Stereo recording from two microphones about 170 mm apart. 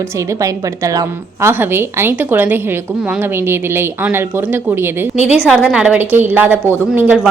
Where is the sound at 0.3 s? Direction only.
20° right (ahead or behind).